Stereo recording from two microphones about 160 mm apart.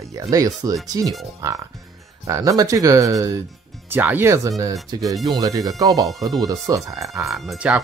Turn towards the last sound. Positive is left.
turn(degrees=-5)  # may be behind; listen again after turning